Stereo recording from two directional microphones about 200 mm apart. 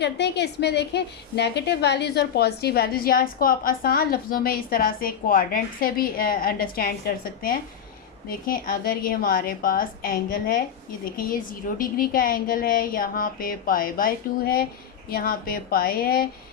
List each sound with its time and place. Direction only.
0.0 s a woman's voice: 60° left (ahead or behind)